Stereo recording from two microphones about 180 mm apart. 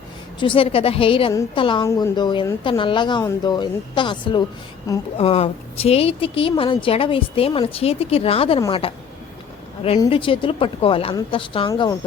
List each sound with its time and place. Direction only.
0.3 s a woman's voice: 30° left (ahead or behind)
10.0 s a woman's voice: 30° left (ahead or behind)
11.7 s a woman's voice: 20° left (ahead or behind)